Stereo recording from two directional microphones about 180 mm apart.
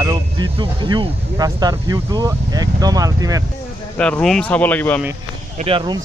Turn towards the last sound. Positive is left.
turn(degrees=-25)  # may be behind; listen again after turning